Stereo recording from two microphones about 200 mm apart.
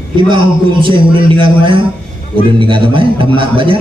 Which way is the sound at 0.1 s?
25° right (ahead or behind).